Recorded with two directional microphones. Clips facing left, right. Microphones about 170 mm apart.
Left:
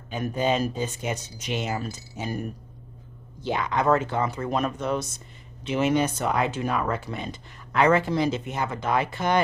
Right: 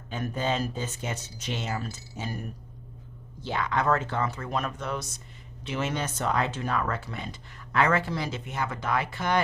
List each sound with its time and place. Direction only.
0.1 s speech: 15° left (ahead or behind)
3.4 s speech: 15° left (ahead or behind)